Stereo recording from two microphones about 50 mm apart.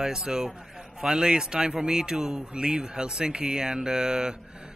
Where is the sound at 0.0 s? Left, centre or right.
Centre.